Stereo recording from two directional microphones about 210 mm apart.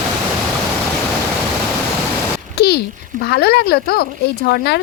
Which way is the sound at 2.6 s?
50° left (ahead or behind).